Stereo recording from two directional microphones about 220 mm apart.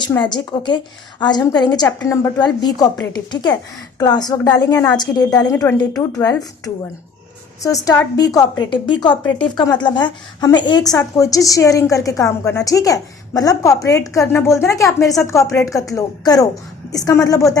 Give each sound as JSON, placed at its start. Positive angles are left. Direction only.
{"t": 0.0, "sound": "a woman's voice", "side_deg": 20}
{"t": 7.6, "sound": "a woman's voice", "side_deg": 15}